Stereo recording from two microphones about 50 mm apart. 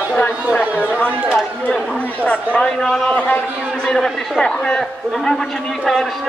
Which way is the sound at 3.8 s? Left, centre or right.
Centre.